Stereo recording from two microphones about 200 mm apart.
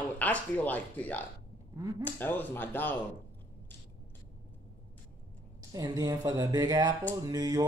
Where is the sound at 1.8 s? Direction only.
20° right (ahead or behind).